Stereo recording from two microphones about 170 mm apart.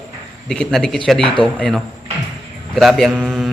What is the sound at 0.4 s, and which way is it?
A man's voice, 5° left (ahead or behind).